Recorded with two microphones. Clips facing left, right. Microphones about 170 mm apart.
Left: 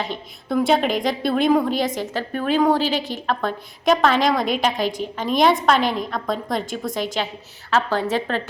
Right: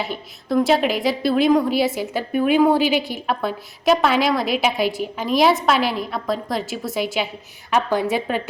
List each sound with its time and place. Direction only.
0.0 s a woman's voice: 5° right (ahead or behind)